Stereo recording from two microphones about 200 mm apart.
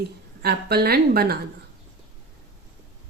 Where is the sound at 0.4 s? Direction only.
50° right (ahead or behind).